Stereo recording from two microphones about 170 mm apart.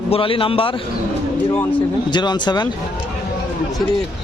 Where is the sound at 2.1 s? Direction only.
25° left (ahead or behind).